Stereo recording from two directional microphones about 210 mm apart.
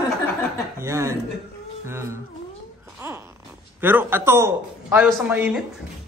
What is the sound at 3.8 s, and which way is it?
Speech, 10° right (ahead or behind).